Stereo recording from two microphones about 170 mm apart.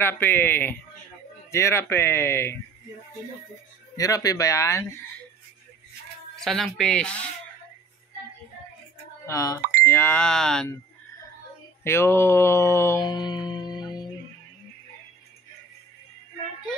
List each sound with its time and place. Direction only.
0.0 s speech: 10° left (ahead or behind)
3.9 s speech: 20° left (ahead or behind)
6.4 s speech: centre (ahead or behind)
9.2 s speech: 20° left (ahead or behind); by 10.7 s 5° left (ahead or behind)
11.8 s music: 15° left (ahead or behind)